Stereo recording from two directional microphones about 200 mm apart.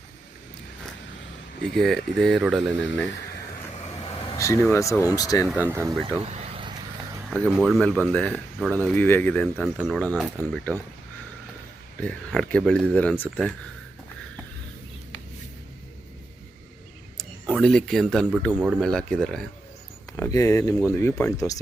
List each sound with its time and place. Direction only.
1.7 s speech: centre (ahead or behind)
4.4 s speech: 15° left (ahead or behind)
5.5 s speech: 10° right (ahead or behind)
6.2 s vehicle: 30° right (ahead or behind)
7.3 s speech: centre (ahead or behind)
11.9 s speech: 5° left (ahead or behind)
17.2 s speech: centre (ahead or behind)
20.1 s speech: 15° left (ahead or behind)